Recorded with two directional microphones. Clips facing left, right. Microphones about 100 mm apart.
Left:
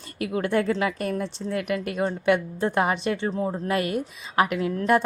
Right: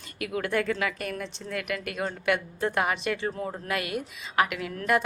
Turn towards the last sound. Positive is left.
turn(degrees=30)  # may be behind; listen again after turning